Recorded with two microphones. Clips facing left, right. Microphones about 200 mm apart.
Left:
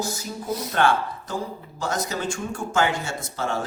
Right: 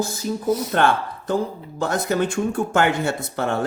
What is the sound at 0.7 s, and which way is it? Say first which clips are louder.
Speech: right 2 dB; 55° right (ahead or behind).